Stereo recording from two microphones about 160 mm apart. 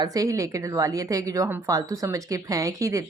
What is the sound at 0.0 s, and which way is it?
A woman's voice, 20° right (ahead or behind).